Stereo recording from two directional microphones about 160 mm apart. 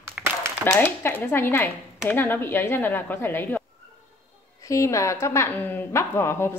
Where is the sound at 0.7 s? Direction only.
10° left (ahead or behind).